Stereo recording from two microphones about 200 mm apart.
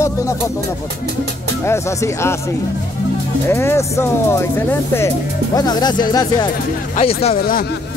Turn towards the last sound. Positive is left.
turn(degrees=45)  # may be behind; listen again after turning